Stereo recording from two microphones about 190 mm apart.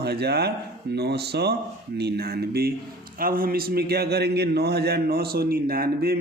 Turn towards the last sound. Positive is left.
turn(degrees=-50)  # may be behind; listen again after turning